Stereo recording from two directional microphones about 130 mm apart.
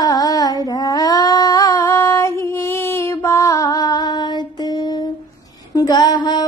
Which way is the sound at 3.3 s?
25° left (ahead or behind).